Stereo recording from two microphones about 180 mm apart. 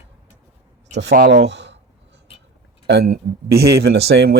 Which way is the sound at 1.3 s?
75° right (ahead or behind).